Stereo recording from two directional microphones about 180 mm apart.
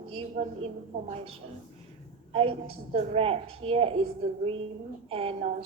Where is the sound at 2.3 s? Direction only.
30° right (ahead or behind).